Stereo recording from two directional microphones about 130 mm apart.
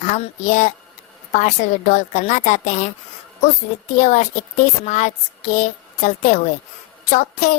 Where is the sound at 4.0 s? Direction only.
70° left (ahead or behind).